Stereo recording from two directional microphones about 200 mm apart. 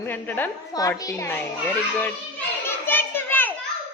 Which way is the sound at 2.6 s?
10° left (ahead or behind).